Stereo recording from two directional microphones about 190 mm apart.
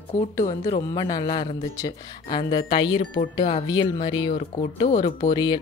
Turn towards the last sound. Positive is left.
turn(degrees=20)  # may be behind; listen again after turning